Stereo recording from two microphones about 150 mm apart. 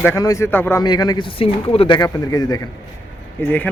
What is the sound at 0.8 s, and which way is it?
Speech, 25° left (ahead or behind).